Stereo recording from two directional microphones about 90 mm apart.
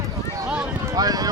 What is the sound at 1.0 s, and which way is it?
Speech, 45° right (ahead or behind).